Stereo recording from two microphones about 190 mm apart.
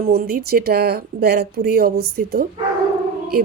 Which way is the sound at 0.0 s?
55° right (ahead or behind).